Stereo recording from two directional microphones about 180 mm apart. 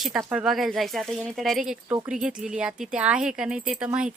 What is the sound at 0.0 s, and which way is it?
Speech, centre (ahead or behind).